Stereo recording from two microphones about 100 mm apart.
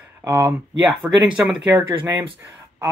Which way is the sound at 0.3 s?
25° right (ahead or behind).